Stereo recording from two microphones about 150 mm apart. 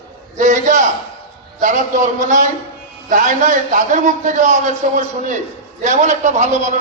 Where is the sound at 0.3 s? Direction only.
55° right (ahead or behind).